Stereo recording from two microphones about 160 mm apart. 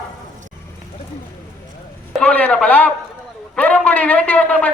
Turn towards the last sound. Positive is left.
turn(degrees=10)  # may be behind; listen again after turning